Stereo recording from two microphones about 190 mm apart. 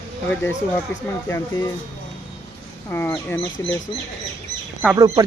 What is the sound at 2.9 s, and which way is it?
Speech, 10° left (ahead or behind).